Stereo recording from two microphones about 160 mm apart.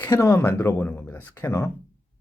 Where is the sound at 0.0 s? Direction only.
15° left (ahead or behind).